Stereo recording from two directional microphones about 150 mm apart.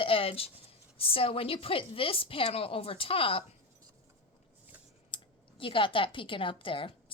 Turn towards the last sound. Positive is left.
turn(degrees=35)  # may be behind; listen again after turning